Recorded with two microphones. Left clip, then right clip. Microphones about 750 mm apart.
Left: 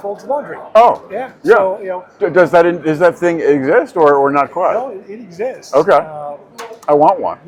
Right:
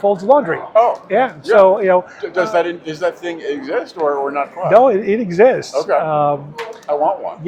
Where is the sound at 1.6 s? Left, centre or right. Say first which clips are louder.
Right 6 dB; right.